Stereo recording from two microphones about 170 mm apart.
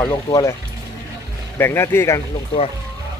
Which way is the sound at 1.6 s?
15° left (ahead or behind).